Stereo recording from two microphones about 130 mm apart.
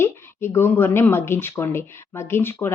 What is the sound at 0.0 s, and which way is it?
Speech, 20° left (ahead or behind).